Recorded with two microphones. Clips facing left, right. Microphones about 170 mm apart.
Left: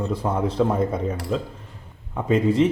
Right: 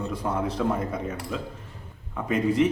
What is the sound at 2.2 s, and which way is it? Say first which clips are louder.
Speech: left 4 dB; 25° left (ahead or behind).